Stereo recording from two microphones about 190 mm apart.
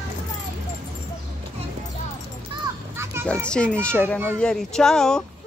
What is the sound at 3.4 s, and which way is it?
Speech, 5° left (ahead or behind).